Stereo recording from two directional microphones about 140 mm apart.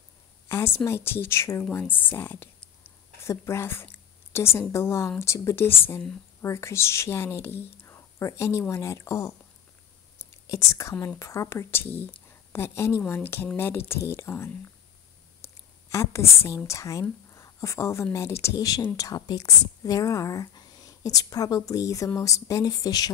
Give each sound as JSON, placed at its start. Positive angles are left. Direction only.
{"t": 0.5, "sound": "a woman's voice", "side_deg": 20}
{"t": 10.1, "sound": "whispering", "side_deg": 20}
{"t": 11.1, "sound": "a woman's voice", "side_deg": 20}